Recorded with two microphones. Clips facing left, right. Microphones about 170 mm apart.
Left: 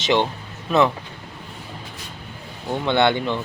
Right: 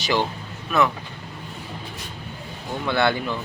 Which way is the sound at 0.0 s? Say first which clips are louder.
Left 3 dB; 25° left (ahead or behind).